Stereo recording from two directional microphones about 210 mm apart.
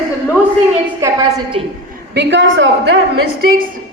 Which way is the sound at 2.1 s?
55° right (ahead or behind).